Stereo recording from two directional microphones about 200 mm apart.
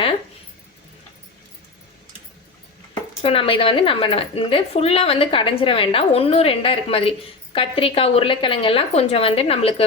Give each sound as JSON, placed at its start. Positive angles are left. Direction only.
{"t": 3.2, "sound": "speech", "side_deg": 30}